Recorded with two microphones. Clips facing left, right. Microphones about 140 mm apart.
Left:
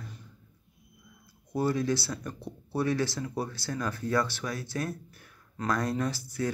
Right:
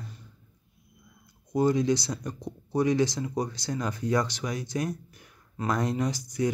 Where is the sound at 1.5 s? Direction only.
20° right (ahead or behind).